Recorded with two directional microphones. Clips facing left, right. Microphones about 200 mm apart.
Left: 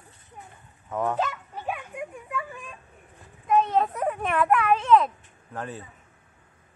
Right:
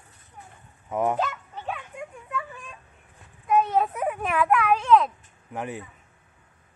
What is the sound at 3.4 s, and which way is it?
Speech, 5° right (ahead or behind).